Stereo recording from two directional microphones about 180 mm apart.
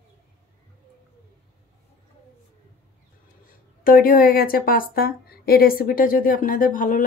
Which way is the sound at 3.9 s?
55° left (ahead or behind).